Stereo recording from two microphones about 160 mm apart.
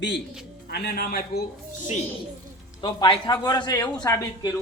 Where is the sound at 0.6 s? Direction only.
75° left (ahead or behind).